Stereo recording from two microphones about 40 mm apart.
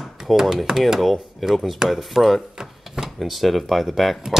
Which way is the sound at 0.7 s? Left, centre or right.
Centre.